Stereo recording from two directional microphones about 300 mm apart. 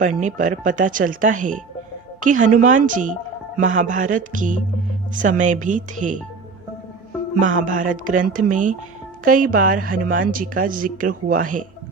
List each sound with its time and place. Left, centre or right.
0.2 s a woman's voice: right
7.3 s a woman's voice: right